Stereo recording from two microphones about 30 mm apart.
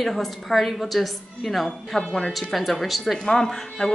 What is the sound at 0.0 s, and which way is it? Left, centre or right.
A woman's voice, centre.